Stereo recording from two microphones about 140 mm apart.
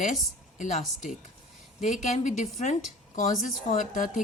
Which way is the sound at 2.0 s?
60° left (ahead or behind).